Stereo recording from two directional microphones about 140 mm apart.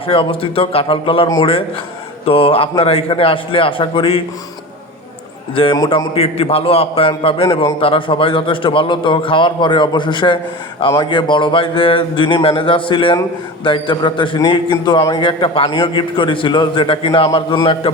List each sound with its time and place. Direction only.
0.1 s a man's voice: 40° left (ahead or behind)
5.5 s a man's voice: 35° left (ahead or behind)
6.1 s a man's voice: 45° left (ahead or behind)